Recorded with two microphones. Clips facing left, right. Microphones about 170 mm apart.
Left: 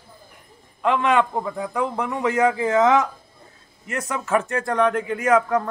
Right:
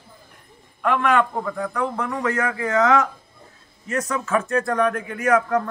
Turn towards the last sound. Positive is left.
turn(degrees=20)  # may be behind; listen again after turning